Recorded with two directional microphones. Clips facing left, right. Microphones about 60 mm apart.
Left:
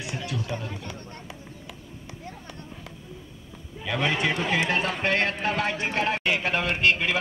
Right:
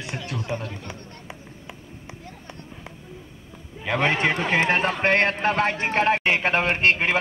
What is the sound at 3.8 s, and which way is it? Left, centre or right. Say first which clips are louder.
A man's voice: right 4 dB; right.